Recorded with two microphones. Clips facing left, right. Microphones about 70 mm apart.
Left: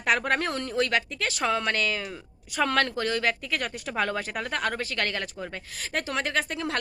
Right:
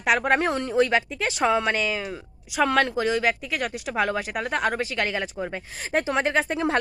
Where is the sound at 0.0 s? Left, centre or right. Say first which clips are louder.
Right 4 dB; centre.